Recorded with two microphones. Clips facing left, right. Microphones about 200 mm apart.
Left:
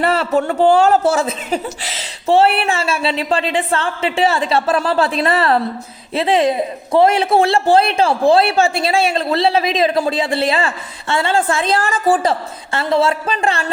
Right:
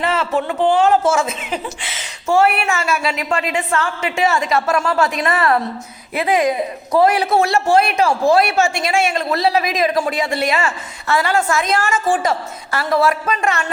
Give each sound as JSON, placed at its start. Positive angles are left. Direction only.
{"t": 0.1, "sound": "a woman's voice", "side_deg": 35}